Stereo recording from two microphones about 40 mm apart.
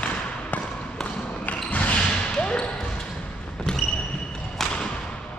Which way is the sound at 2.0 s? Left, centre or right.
Left.